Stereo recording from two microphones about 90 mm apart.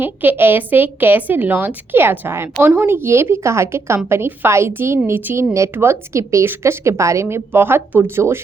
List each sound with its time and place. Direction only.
0.0 s a woman's voice: 20° right (ahead or behind)